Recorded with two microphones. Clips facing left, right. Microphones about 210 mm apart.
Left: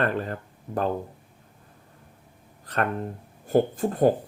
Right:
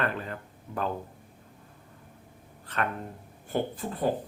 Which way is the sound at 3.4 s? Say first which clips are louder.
Left 9 dB; 40° left (ahead or behind).